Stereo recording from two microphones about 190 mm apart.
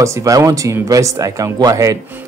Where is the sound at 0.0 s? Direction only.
15° right (ahead or behind).